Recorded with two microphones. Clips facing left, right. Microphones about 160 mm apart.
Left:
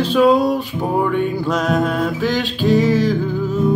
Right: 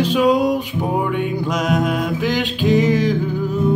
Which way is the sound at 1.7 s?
15° right (ahead or behind).